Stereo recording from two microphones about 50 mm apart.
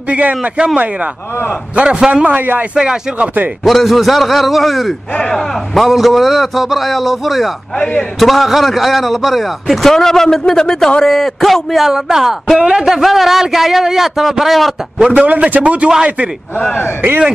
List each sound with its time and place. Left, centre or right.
0.1 s a man's voice: right
1.8 s speech: centre
2.2 s a man's voice: right
2.7 s speech: centre
3.6 s a man's voice: centre
5.1 s speech: centre
5.9 s a man's voice: centre
12.5 s a man's voice: centre
12.8 s a man's voice: centre
15.1 s a man's voice: right
15.6 s a man's voice: right